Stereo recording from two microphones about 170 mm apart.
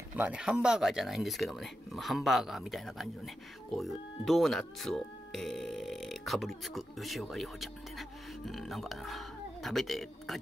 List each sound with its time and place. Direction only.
0.1 s speech: 5° right (ahead or behind)